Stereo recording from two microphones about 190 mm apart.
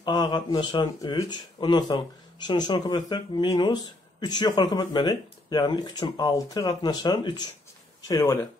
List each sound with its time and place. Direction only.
0.0 s speech: 20° left (ahead or behind)